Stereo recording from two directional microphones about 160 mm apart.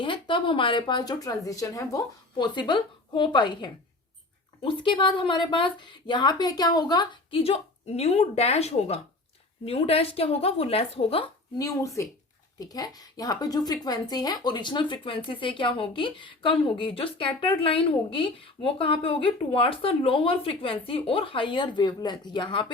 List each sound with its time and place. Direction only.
0.0 s speech: 30° left (ahead or behind)
11.5 s speech: 20° left (ahead or behind)